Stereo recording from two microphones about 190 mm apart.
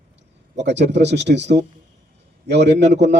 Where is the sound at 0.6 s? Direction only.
65° right (ahead or behind).